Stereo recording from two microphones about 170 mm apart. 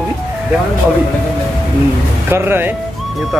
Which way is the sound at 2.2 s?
15° right (ahead or behind).